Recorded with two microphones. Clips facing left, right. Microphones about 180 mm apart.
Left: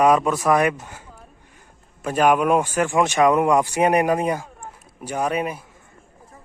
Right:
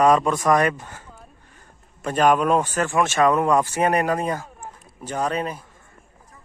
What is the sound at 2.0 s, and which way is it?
A man's voice, 10° left (ahead or behind).